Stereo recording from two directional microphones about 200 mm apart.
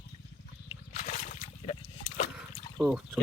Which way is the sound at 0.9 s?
40° left (ahead or behind).